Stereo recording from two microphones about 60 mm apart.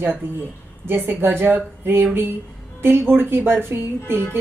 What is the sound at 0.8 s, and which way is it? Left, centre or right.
A woman's voice, right.